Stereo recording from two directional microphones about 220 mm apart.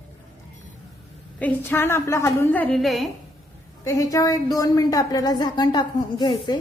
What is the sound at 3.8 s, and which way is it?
A woman's voice, 15° left (ahead or behind).